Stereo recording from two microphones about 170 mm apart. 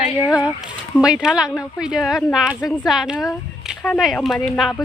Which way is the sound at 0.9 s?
5° right (ahead or behind).